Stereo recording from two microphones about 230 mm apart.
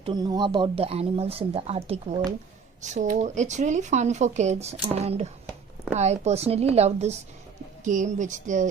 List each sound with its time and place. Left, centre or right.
0.0 s speech: centre; by 8.6 s right